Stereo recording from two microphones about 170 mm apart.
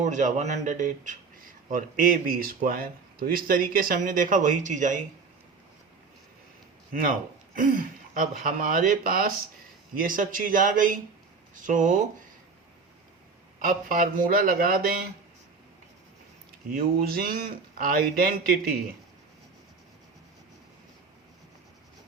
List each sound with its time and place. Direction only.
0.0 s speech: 45° right (ahead or behind)
7.5 s speech: 55° right (ahead or behind)
13.6 s speech: 55° right (ahead or behind)
16.7 s speech: 65° right (ahead or behind)